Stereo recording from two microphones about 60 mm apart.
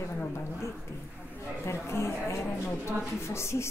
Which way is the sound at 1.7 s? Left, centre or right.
Left.